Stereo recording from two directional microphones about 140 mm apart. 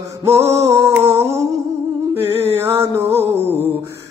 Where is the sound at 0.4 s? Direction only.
50° right (ahead or behind).